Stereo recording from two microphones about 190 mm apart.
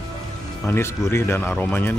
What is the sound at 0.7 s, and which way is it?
A man's voice, 15° left (ahead or behind).